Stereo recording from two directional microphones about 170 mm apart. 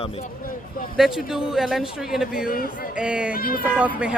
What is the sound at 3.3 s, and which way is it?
Speech, 60° left (ahead or behind).